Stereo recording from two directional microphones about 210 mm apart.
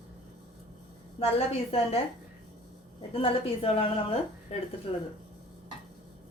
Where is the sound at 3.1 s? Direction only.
25° left (ahead or behind).